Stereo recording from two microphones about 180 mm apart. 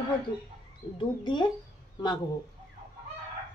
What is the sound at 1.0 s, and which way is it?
Speech, 25° left (ahead or behind).